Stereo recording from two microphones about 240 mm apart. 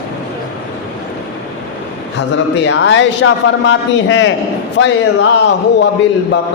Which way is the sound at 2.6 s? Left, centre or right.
Left.